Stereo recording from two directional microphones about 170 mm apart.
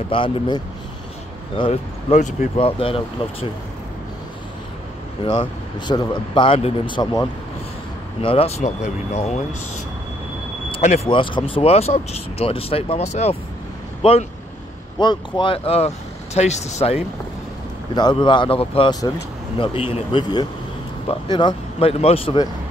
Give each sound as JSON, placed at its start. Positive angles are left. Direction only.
{"t": 0.1, "sound": "speech", "side_deg": 30}
{"t": 1.6, "sound": "speech", "side_deg": 40}
{"t": 5.2, "sound": "speech", "side_deg": 30}
{"t": 8.2, "sound": "speech", "side_deg": 35}
{"t": 10.7, "sound": "speech", "side_deg": 35}
{"t": 15.0, "sound": "speech", "side_deg": 25}
{"t": 17.9, "sound": "speech", "side_deg": 25}